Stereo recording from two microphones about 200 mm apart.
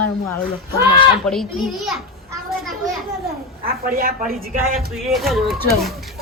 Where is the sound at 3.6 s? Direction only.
45° right (ahead or behind).